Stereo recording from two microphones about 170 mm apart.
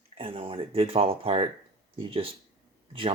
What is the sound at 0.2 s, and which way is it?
Speech, 35° right (ahead or behind).